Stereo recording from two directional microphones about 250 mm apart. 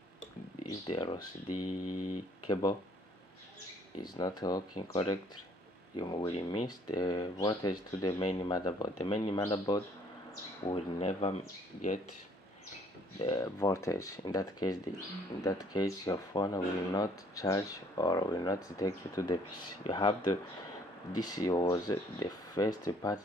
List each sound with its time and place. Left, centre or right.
0.8 s speech: centre
1.5 s mantra: left
2.4 s speech: centre
4.0 s speech: centre
10.7 s speech: left
13.2 s speech: centre